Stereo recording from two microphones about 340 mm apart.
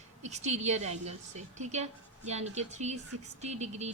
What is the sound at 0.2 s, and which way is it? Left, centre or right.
A woman's voice, centre.